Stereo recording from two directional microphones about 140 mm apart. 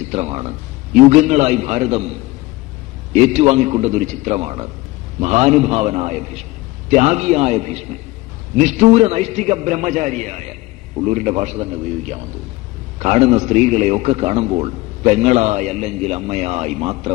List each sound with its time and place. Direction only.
0.0 s a man's voice: 55° right (ahead or behind)